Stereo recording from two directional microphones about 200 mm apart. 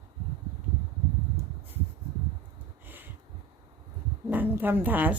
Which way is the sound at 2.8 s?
10° right (ahead or behind).